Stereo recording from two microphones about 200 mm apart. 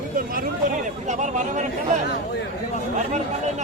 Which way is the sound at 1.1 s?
40° right (ahead or behind).